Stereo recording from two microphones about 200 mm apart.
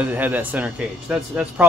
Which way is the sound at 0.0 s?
10° right (ahead or behind).